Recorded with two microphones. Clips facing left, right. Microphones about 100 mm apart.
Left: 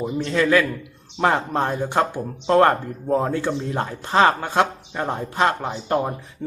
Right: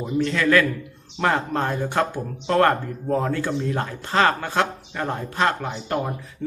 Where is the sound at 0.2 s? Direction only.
25° left (ahead or behind).